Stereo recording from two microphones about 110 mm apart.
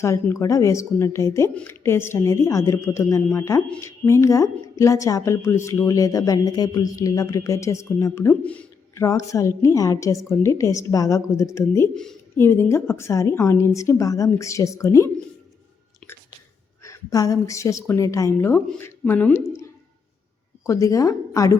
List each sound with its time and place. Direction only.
0.0 s a woman's voice: 25° left (ahead or behind)
8.3 s speech: 10° left (ahead or behind)
9.0 s a woman's voice: 30° left (ahead or behind)
16.8 s a woman's voice: 30° left (ahead or behind)
20.7 s a woman's voice: 30° left (ahead or behind)